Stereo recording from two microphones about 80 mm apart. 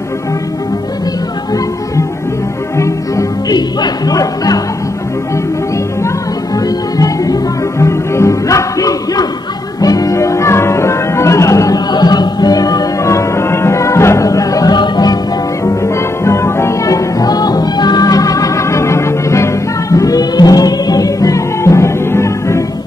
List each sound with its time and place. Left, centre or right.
2.8 s music: left
3.5 s music: left
6.0 s music: left
7.8 s music: left
11.9 s music: left
15.6 s music: left